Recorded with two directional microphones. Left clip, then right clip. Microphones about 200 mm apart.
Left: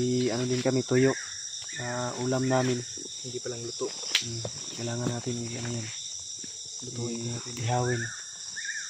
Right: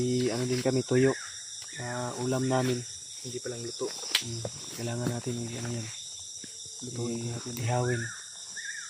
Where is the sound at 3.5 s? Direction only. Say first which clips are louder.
Left 1 dB; 20° right (ahead or behind).